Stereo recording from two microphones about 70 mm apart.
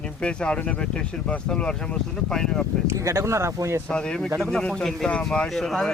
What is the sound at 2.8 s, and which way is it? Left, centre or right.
Speech, right.